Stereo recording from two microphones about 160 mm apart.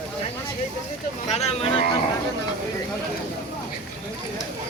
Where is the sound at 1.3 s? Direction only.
40° left (ahead or behind).